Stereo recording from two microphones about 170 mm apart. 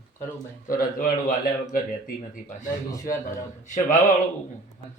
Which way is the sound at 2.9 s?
20° left (ahead or behind).